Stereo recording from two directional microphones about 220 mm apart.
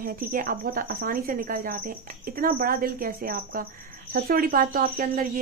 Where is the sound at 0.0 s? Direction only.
40° right (ahead or behind).